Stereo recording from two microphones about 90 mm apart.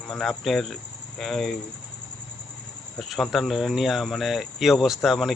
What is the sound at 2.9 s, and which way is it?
Speech, centre (ahead or behind).